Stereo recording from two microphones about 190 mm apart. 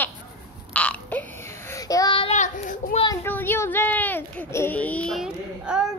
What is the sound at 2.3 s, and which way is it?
Speech, 40° left (ahead or behind).